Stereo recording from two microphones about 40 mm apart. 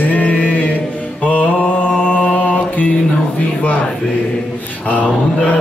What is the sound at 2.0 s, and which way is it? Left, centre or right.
Mantra, left.